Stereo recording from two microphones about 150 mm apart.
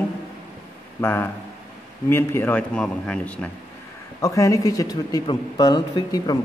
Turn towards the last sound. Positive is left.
turn(degrees=25)  # may be behind; listen again after turning